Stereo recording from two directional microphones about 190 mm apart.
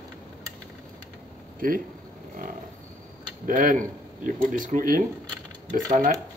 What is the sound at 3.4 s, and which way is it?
Speech, 45° right (ahead or behind).